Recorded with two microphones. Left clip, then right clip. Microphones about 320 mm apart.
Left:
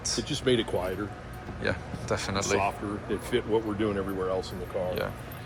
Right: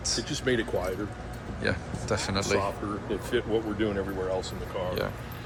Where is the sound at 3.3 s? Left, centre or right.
Left.